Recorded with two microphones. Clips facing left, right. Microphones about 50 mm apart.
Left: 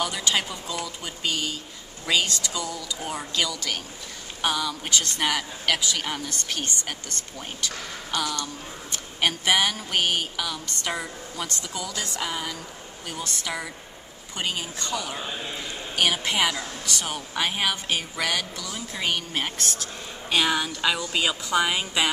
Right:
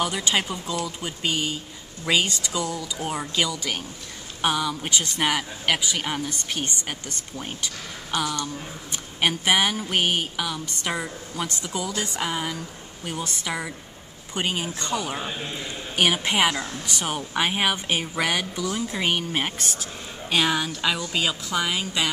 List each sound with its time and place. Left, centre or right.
0.0 s speech: centre